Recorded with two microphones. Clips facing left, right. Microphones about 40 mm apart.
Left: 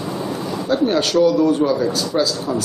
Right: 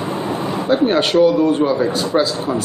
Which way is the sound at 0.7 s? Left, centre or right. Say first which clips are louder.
Right 2 dB; right.